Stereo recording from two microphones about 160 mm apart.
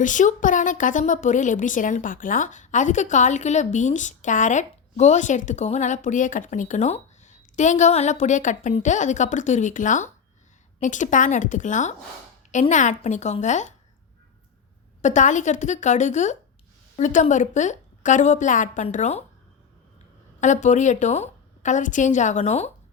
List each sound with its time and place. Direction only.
0.0 s a woman's voice: 50° left (ahead or behind)
15.0 s a woman's voice: 50° left (ahead or behind)
20.4 s a woman's voice: 50° left (ahead or behind)